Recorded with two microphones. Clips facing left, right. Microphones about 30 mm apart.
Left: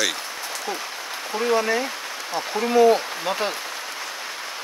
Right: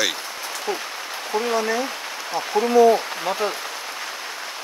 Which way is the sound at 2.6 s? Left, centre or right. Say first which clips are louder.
Right 5 dB; right.